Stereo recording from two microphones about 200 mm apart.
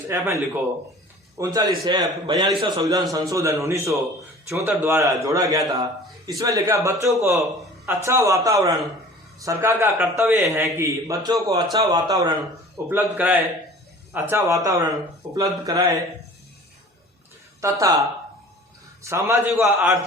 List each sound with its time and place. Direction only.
0.1 s a man's voice: 15° right (ahead or behind)
12.9 s a man's voice: 10° right (ahead or behind)
17.6 s a man's voice: 15° right (ahead or behind)